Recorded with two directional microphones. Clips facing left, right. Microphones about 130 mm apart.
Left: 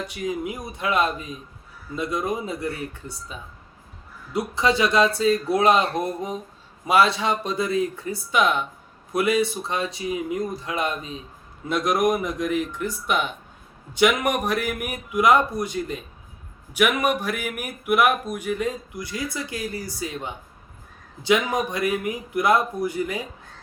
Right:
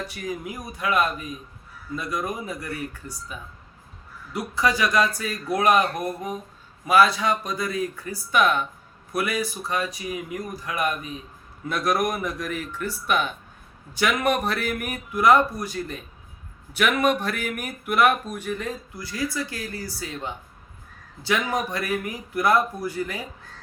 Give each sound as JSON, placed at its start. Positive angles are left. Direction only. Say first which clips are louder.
{"t": 0.1, "sound": "speech", "louder": "left 4 dB", "side_deg": 20}